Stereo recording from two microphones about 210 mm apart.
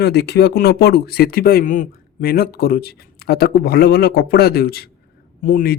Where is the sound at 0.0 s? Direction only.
50° left (ahead or behind).